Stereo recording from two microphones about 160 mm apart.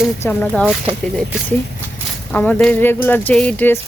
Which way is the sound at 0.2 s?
10° left (ahead or behind).